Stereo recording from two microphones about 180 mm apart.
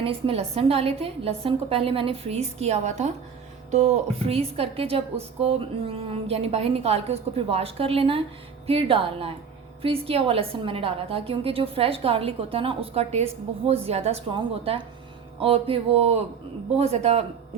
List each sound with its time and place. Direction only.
0.0 s a woman's voice: 30° right (ahead or behind)